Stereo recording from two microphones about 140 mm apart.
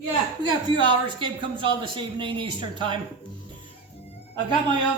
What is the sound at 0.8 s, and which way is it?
Speech, 35° right (ahead or behind).